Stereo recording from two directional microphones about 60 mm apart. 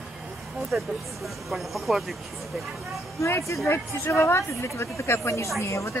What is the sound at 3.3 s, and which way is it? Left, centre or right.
A woman's voice, left.